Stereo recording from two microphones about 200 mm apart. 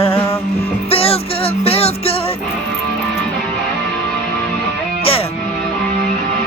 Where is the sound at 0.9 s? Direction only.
30° left (ahead or behind).